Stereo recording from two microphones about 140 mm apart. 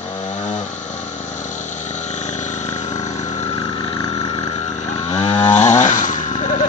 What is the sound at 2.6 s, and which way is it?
Vehicle, 55° left (ahead or behind).